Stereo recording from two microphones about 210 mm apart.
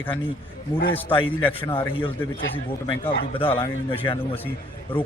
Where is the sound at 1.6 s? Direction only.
25° left (ahead or behind).